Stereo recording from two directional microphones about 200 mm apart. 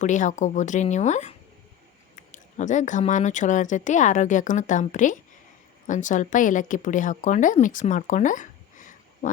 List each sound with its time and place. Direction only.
0.0 s a woman's voice: 40° left (ahead or behind)